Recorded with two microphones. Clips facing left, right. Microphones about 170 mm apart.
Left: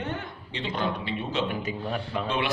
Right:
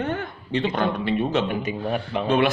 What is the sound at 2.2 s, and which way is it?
Speech, 50° right (ahead or behind).